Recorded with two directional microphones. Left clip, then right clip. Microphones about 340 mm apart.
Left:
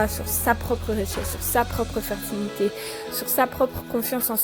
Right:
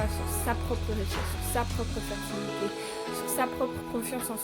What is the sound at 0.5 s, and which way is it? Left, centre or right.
Speech, centre.